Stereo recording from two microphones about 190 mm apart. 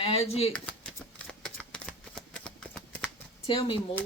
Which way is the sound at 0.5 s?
5° left (ahead or behind).